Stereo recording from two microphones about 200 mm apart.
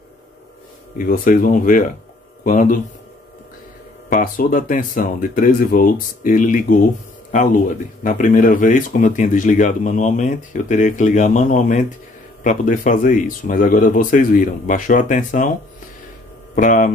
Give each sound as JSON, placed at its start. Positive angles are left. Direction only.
{"t": 0.9, "sound": "speech", "side_deg": 45}
{"t": 4.1, "sound": "speech", "side_deg": 45}
{"t": 8.0, "sound": "speech", "side_deg": 40}
{"t": 16.5, "sound": "speech", "side_deg": 40}